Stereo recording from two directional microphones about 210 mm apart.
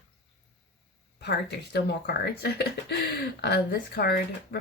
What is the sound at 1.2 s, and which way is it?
Speech, 50° left (ahead or behind).